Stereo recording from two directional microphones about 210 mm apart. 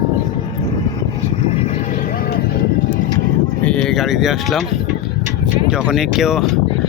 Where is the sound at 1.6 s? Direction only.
35° left (ahead or behind).